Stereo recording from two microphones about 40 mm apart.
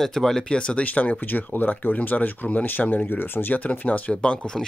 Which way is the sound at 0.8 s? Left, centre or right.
Left.